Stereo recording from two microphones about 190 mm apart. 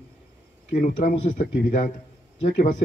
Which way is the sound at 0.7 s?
40° left (ahead or behind).